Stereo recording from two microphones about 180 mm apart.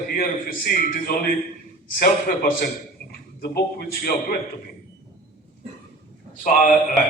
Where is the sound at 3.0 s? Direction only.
55° left (ahead or behind).